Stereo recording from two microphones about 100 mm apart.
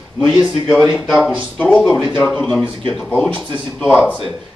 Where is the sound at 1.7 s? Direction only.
10° left (ahead or behind).